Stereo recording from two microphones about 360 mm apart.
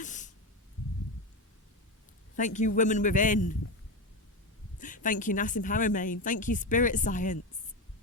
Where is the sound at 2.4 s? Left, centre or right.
Centre.